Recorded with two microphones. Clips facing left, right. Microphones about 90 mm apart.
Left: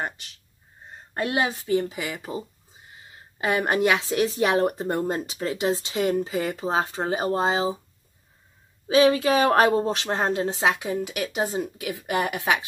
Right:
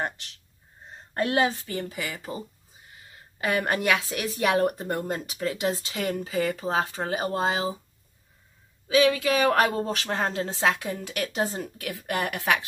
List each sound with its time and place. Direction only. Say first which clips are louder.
1.5 s a woman's voice: left 8 dB; 15° left (ahead or behind)
8.8 s a woman's voice: left 3 dB; 35° left (ahead or behind)